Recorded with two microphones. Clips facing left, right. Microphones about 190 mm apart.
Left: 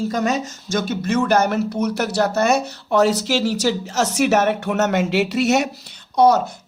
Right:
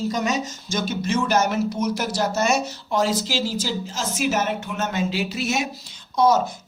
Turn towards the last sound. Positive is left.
turn(degrees=65)  # may be behind; listen again after turning